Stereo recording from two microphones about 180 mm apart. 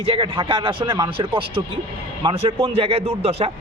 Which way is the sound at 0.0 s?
30° right (ahead or behind).